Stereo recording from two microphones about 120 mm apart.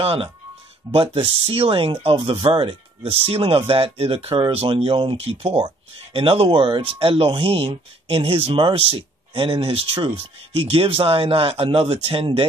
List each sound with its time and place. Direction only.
0.0 s speech: 50° right (ahead or behind)